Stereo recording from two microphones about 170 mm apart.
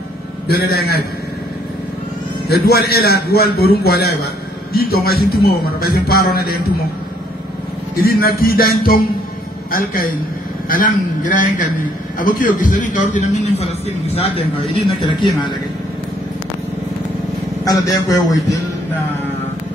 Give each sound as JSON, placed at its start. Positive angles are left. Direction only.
{"t": 0.5, "sound": "a man's voice", "side_deg": 65}
{"t": 2.5, "sound": "a man's voice", "side_deg": 70}
{"t": 7.9, "sound": "a man's voice", "side_deg": 65}
{"t": 17.6, "sound": "a man's voice", "side_deg": 20}